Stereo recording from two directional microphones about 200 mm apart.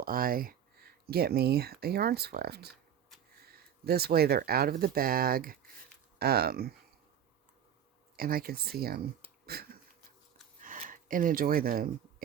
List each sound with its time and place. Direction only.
0.0 s speech: 45° right (ahead or behind)
8.1 s speech: 45° right (ahead or behind)
10.6 s a sound: 40° right (ahead or behind)